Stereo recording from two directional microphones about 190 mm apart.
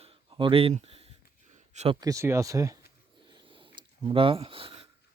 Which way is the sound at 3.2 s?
25° right (ahead or behind).